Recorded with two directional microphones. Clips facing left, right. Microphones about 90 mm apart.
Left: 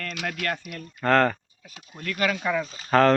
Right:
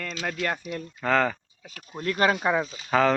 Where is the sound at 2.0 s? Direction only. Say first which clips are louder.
Right 3 dB; 30° right (ahead or behind).